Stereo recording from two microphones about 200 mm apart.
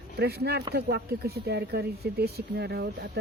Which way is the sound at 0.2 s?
55° right (ahead or behind).